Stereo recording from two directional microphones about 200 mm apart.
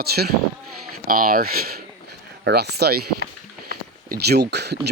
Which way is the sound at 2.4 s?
55° right (ahead or behind).